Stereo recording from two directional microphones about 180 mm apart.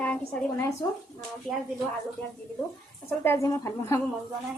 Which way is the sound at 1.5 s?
Centre (ahead or behind).